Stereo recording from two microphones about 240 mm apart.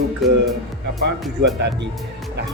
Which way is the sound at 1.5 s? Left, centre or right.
Right.